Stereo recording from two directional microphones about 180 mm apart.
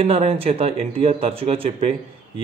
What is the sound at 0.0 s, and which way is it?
A man's voice, 35° right (ahead or behind).